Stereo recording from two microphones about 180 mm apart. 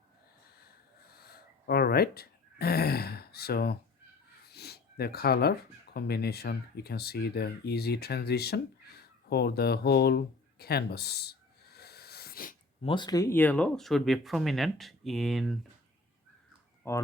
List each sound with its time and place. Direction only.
0.6 s a sound: 60° left (ahead or behind)
4.4 s speech: 65° left (ahead or behind)
12.8 s speech: 25° left (ahead or behind); by 15.5 s centre (ahead or behind)
16.8 s speech: 15° left (ahead or behind)